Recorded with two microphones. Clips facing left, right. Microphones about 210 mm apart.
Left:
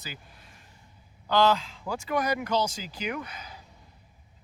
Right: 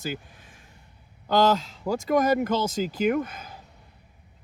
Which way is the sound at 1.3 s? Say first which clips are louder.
Right 2 dB; 45° right (ahead or behind).